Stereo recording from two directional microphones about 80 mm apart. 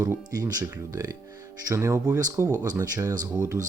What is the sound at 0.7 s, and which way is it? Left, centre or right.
Speech, right.